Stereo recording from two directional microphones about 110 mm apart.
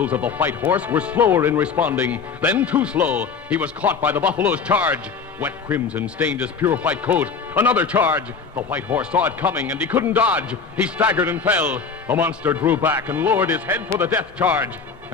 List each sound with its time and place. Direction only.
0.0 s speech: 15° right (ahead or behind)